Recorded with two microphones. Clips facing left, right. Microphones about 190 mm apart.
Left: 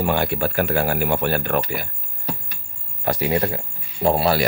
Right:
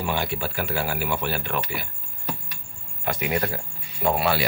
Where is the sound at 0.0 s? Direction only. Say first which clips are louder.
Left 6 dB; 50° left (ahead or behind).